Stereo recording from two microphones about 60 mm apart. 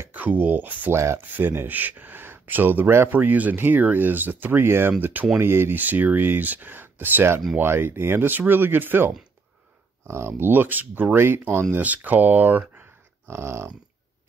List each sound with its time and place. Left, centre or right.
0.1 s speech: right
5.0 s speech: right
5.4 s speech: right
10.0 s speech: right
11.1 s speech: right
11.7 s speech: right
13.3 s a sound: right